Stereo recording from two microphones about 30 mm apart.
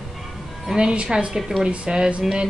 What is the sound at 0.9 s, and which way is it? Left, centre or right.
Speech, right.